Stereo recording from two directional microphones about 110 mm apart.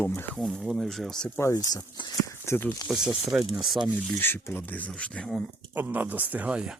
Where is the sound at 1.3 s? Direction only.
25° left (ahead or behind).